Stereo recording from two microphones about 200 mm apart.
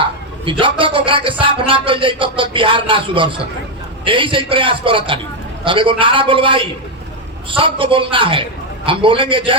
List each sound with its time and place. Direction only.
0.4 s speech: 25° right (ahead or behind)